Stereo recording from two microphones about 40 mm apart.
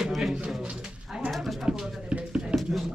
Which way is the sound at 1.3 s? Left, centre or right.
Centre.